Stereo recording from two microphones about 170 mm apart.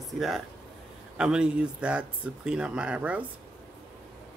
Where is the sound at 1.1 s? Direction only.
5° right (ahead or behind).